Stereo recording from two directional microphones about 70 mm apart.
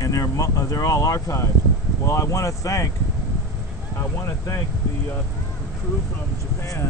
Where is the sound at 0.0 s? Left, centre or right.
Left.